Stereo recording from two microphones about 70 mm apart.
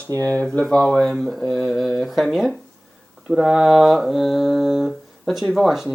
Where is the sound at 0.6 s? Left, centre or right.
Centre.